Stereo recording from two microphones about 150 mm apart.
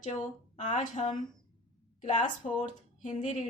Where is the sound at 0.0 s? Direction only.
55° left (ahead or behind).